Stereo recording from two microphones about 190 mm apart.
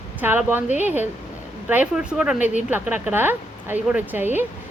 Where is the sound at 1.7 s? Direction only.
5° right (ahead or behind).